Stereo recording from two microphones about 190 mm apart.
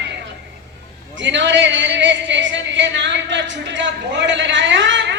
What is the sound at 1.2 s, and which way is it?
Speech, 70° right (ahead or behind).